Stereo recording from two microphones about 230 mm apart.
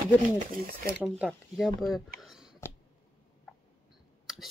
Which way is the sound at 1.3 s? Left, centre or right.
Centre.